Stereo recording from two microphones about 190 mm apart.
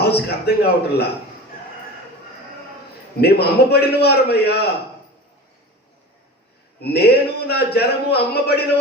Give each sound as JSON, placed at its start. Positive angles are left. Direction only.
{"t": 0.0, "sound": "a man's voice", "side_deg": 60}
{"t": 3.2, "sound": "a man's voice", "side_deg": 60}
{"t": 6.8, "sound": "a man's voice", "side_deg": 60}